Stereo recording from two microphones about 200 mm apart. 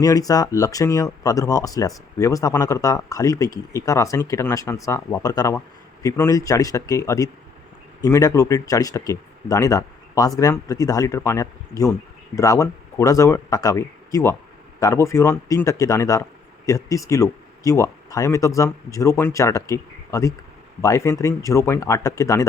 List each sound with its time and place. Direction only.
0.0 s speech: 20° left (ahead or behind)